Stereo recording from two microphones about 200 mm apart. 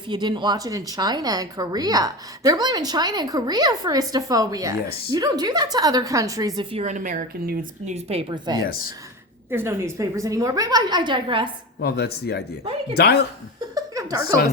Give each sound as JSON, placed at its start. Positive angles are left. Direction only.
{"t": 0.1, "sound": "speech", "side_deg": -20}
{"t": 6.6, "sound": "speech", "side_deg": -30}
{"t": 8.6, "sound": "speech", "side_deg": 45}
{"t": 9.5, "sound": "speech", "side_deg": -10}
{"t": 11.8, "sound": "speech", "side_deg": 55}
{"t": 13.7, "sound": "chuckle", "side_deg": -15}